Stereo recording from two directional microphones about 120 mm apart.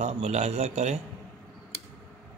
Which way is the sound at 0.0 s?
65° right (ahead or behind).